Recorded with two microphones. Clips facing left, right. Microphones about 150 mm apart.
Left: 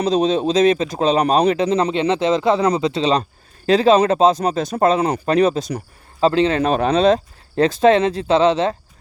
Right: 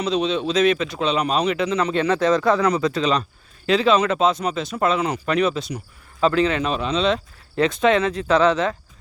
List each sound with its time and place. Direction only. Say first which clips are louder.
0.0 s speech: left 5 dB; 40° left (ahead or behind)
1.9 s speech: left 1 dB; 20° left (ahead or behind)
6.6 s speech: left 6 dB; 50° left (ahead or behind); by 8.7 s 30° left (ahead or behind)